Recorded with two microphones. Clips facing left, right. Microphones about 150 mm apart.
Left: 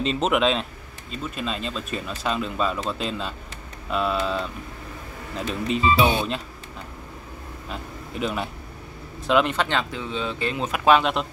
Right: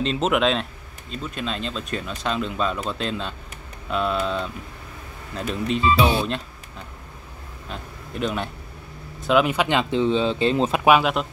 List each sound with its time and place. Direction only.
0.0 s speech: centre (ahead or behind)
7.7 s speech: centre (ahead or behind); by 10.8 s 25° right (ahead or behind)
10.8 s speech: 10° right (ahead or behind)